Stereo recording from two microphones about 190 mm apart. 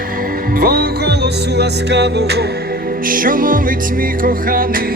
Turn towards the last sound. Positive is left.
turn(degrees=-50)  # may be behind; listen again after turning